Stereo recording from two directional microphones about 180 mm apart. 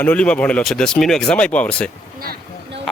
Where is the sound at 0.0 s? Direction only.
5° left (ahead or behind).